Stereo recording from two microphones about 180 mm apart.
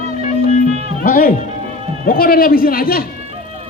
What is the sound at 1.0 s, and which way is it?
Speech, 50° left (ahead or behind).